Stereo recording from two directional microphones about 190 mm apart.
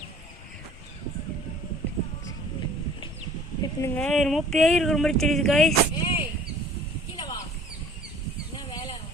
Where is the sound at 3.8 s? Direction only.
10° left (ahead or behind).